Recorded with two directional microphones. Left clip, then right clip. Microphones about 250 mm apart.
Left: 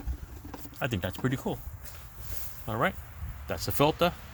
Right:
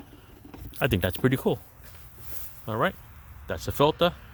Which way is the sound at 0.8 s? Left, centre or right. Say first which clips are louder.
Right 7 dB; right.